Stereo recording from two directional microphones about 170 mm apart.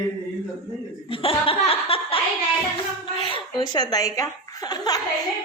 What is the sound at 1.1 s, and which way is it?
Laughter, 30° left (ahead or behind).